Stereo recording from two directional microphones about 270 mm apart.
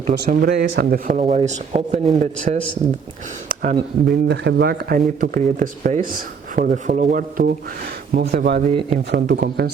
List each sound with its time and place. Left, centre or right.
0.1 s speech: right